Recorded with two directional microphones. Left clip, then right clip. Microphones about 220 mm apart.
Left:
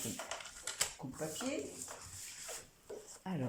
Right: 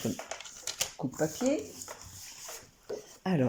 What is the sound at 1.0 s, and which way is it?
Speech, 45° right (ahead or behind).